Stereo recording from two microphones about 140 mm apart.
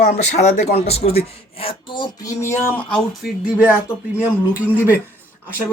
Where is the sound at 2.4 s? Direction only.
15° left (ahead or behind).